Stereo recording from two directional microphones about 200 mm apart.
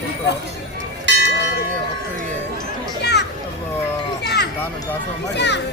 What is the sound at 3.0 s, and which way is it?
Speech, 55° left (ahead or behind).